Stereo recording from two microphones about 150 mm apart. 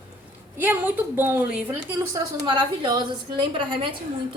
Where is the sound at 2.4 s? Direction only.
30° right (ahead or behind).